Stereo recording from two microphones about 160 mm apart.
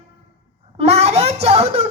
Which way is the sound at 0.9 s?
40° right (ahead or behind).